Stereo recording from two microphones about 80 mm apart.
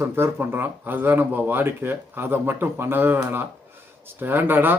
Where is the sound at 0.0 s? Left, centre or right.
Right.